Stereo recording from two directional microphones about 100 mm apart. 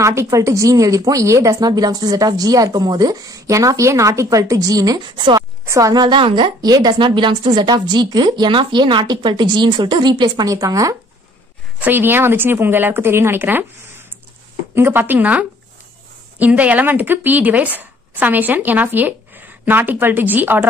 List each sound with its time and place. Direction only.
0.0 s speech: 30° right (ahead or behind); by 5.4 s 50° right (ahead or behind)
5.7 s speech: 35° right (ahead or behind)
6.0 s a woman's voice: 50° right (ahead or behind); by 11.0 s 35° right (ahead or behind)
11.8 s speech: 20° right (ahead or behind)